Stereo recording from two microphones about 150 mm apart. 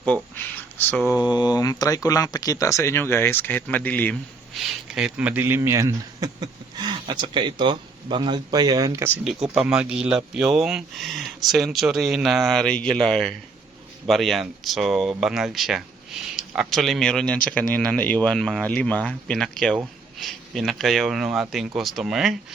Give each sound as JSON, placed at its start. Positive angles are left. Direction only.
{"t": 0.8, "sound": "mantra", "side_deg": 10}
{"t": 1.2, "sound": "speech", "side_deg": 25}
{"t": 9.2, "sound": "speech", "side_deg": -5}